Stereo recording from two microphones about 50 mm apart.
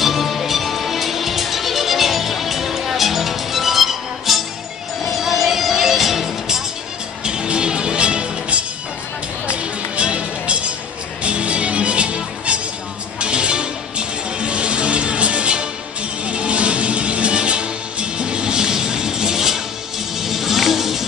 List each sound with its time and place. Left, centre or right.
0.0 s music: centre
7.2 s music: centre